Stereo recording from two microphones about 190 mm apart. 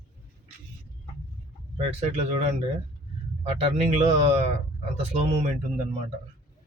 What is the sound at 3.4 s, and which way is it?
Speech, 35° right (ahead or behind).